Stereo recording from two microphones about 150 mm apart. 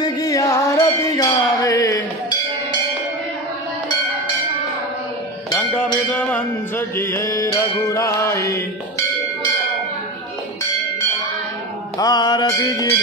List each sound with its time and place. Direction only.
0.0 s music: 25° left (ahead or behind)
5.5 s music: 10° left (ahead or behind)
7.0 s mantra: 15° left (ahead or behind)
12.0 s music: 25° left (ahead or behind)